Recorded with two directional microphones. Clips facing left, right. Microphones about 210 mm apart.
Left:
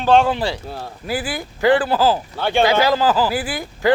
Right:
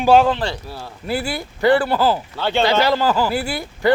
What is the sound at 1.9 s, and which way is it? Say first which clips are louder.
Speech: left 1 dB; 5° left (ahead or behind).